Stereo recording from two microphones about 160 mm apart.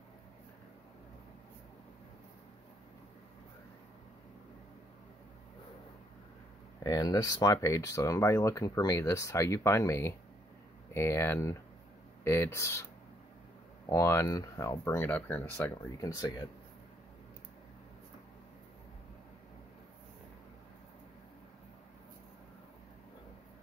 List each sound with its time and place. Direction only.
6.8 s speech: 25° left (ahead or behind)
13.8 s speech: 20° left (ahead or behind)